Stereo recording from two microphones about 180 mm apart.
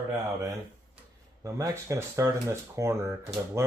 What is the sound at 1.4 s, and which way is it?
Speech, 15° right (ahead or behind).